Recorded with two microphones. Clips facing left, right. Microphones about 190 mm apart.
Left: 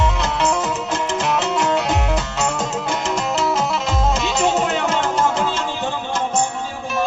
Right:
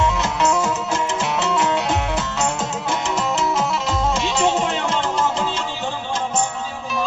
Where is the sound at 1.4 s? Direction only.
40° left (ahead or behind).